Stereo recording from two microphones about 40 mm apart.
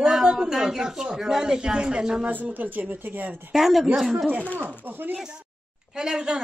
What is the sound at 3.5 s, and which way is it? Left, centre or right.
Speech, centre.